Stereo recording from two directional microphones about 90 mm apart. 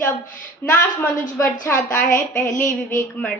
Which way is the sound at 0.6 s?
25° left (ahead or behind).